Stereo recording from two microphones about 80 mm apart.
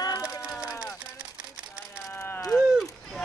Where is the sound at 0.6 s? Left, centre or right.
Left.